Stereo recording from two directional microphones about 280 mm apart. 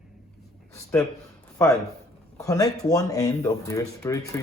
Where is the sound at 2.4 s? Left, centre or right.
Centre.